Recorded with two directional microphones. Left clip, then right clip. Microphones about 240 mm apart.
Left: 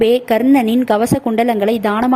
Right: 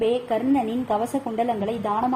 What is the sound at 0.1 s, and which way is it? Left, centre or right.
A woman's voice, left.